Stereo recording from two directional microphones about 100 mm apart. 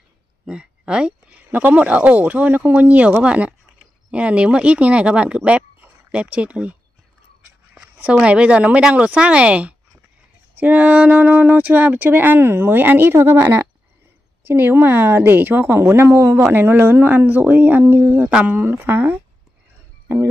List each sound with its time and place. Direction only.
0.5 s speech: 10° right (ahead or behind)